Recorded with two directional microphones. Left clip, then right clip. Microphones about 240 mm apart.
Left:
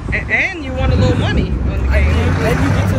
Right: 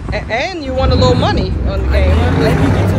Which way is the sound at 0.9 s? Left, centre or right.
Right.